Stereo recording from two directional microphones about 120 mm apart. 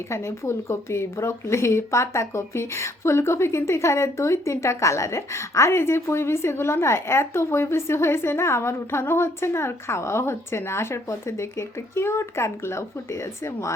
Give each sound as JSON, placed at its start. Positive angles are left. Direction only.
{"t": 0.1, "sound": "speech", "side_deg": 25}